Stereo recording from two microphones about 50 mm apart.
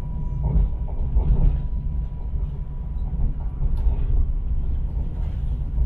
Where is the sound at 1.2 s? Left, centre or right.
Left.